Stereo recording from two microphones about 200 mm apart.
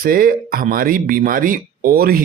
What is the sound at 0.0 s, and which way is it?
Speech, 45° right (ahead or behind).